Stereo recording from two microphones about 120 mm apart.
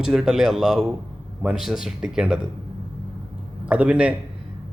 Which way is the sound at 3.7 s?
10° right (ahead or behind).